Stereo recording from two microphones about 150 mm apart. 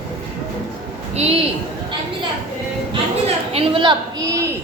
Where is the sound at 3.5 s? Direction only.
35° right (ahead or behind).